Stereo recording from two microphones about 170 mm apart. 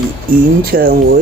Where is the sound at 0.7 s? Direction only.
60° right (ahead or behind).